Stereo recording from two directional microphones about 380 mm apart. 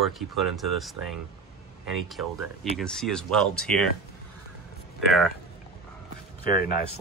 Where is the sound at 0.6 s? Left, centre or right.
Centre.